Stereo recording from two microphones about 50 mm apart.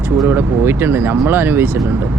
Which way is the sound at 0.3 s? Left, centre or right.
Right.